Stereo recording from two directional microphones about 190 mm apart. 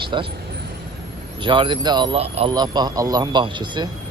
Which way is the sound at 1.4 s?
25° right (ahead or behind).